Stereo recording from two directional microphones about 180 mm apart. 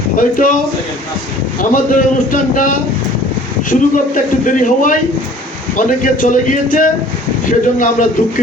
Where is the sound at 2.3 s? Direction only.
45° left (ahead or behind).